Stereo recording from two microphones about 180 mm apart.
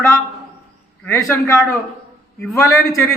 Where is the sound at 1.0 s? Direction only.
15° left (ahead or behind).